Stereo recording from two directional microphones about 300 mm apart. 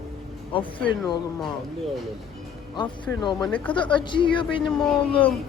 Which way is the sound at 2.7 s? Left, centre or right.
Centre.